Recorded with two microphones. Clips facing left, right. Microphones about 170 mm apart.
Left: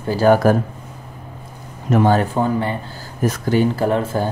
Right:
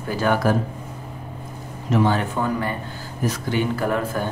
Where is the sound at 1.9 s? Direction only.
50° left (ahead or behind).